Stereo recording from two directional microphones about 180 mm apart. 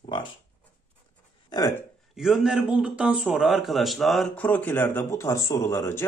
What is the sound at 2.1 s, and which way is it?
A man's voice, centre (ahead or behind).